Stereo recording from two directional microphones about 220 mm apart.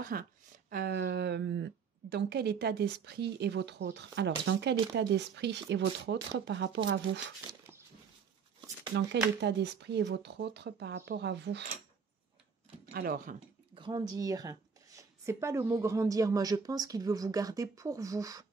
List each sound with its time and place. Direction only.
0.0 s speech: 40° right (ahead or behind)
9.4 s speech: 50° right (ahead or behind)
12.9 s speech: 40° right (ahead or behind)
13.7 s speech: 20° right (ahead or behind)